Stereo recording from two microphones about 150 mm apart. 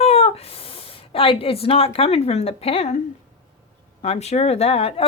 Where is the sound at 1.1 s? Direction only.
40° left (ahead or behind).